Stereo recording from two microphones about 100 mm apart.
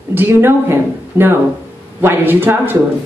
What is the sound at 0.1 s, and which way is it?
A woman's voice, 20° right (ahead or behind).